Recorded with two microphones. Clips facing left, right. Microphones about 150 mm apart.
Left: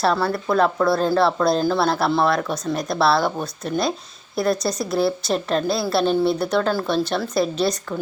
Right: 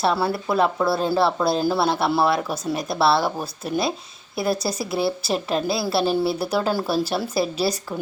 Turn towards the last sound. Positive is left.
turn(degrees=-5)  # may be behind; listen again after turning